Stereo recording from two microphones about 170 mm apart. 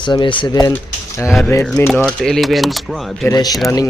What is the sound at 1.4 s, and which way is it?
Speech, 10° left (ahead or behind).